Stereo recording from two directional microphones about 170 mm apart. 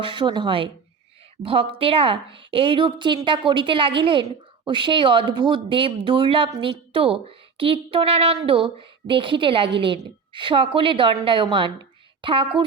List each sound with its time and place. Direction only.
0.0 s a woman's voice: 30° right (ahead or behind)
1.8 s a woman's voice: 35° right (ahead or behind)
11.5 s a sound: 30° right (ahead or behind)